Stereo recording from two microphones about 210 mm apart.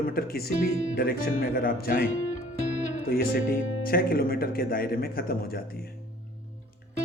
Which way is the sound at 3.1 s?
45° left (ahead or behind).